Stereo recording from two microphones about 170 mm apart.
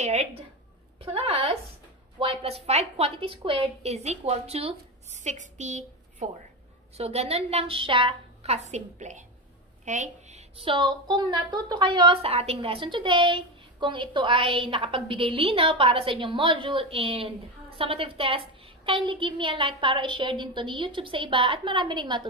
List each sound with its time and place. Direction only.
0.0 s a woman's voice: 40° right (ahead or behind)
10.6 s a woman's voice: 30° right (ahead or behind)